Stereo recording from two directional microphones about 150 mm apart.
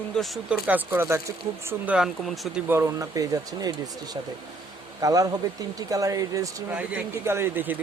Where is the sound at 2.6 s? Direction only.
15° right (ahead or behind).